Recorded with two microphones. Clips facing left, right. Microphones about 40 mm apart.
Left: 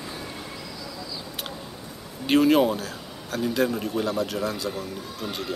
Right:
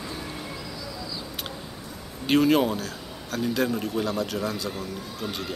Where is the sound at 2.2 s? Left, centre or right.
Centre.